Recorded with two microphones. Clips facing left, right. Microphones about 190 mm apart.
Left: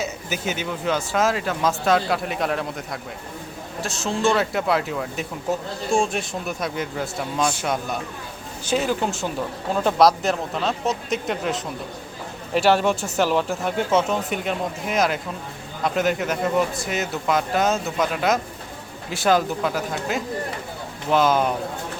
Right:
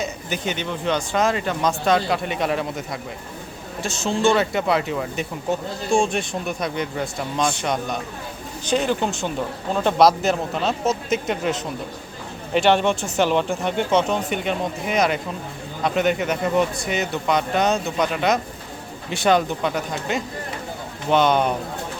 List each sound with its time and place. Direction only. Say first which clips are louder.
0.0 s speech: right 1 dB; 5° left (ahead or behind)